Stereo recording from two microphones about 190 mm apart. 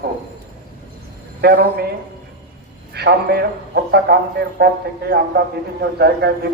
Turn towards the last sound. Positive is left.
turn(degrees=-60)  # may be behind; listen again after turning